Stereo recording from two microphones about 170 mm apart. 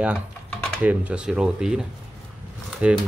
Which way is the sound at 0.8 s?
5° right (ahead or behind).